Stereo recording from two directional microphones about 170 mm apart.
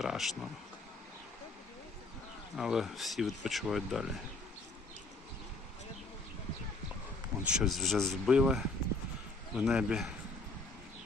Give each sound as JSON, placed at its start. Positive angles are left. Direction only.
{"t": 0.0, "sound": "speech", "side_deg": 0}
{"t": 2.6, "sound": "speech", "side_deg": -5}
{"t": 7.4, "sound": "speech", "side_deg": -5}